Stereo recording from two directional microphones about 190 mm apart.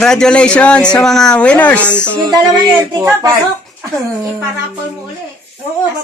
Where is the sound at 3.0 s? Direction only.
15° right (ahead or behind).